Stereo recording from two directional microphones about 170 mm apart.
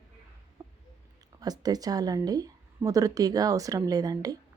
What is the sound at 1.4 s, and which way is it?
A woman's voice, 20° right (ahead or behind).